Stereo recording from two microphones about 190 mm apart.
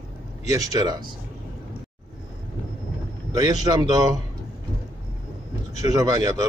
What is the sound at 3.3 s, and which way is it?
Speech, 20° right (ahead or behind).